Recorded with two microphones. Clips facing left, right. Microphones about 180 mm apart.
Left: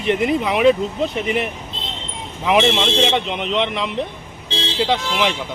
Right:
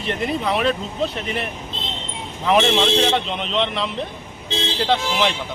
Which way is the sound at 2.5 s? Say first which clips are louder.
Even; 5° left (ahead or behind).